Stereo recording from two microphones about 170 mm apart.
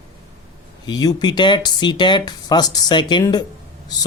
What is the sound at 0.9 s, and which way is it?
Speech, 25° left (ahead or behind).